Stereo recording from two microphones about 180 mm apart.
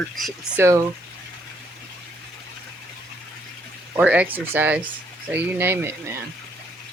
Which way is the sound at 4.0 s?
10° right (ahead or behind).